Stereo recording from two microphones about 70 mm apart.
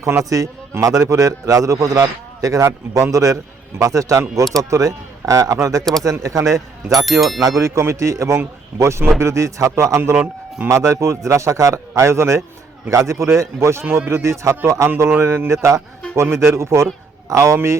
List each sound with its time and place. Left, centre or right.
0.0 s a man's voice: right
5.8 s speech: centre
6.1 s a man's voice: right
6.9 s speech: centre
7.6 s a man's voice: right